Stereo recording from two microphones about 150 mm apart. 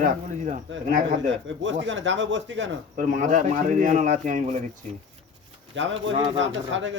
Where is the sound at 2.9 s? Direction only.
60° right (ahead or behind).